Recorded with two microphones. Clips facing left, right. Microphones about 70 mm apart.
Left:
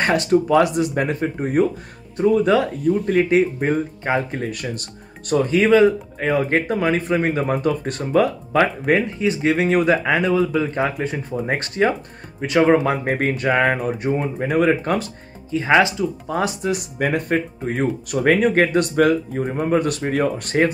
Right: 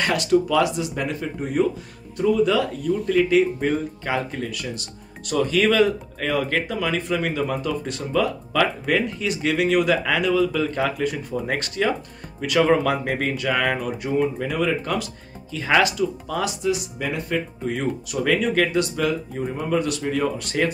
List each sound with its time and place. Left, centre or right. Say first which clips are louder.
0.0 s speech: left 2 dB; left
5.3 s speech: left 4 dB; left
15.5 s speech: left 3 dB; left